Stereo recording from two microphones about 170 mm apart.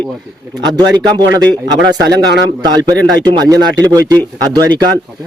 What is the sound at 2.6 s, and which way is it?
A man's voice, 25° right (ahead or behind).